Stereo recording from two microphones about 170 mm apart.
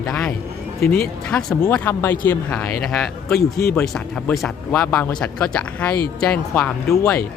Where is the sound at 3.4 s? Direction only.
65° left (ahead or behind).